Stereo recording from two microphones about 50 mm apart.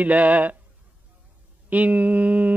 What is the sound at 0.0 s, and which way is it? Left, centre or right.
Speech, right.